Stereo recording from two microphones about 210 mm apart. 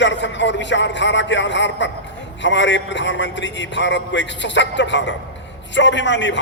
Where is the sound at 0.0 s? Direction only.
60° left (ahead or behind).